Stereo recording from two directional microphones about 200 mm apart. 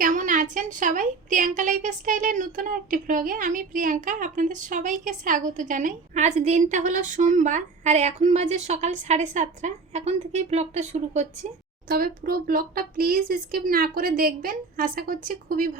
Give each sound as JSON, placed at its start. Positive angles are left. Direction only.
{"t": 0.0, "sound": "a woman's voice", "side_deg": -40}
{"t": 11.9, "sound": "speech", "side_deg": -45}